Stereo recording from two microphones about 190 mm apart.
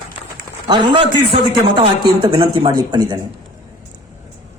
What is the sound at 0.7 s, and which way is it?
A man's voice, 30° right (ahead or behind).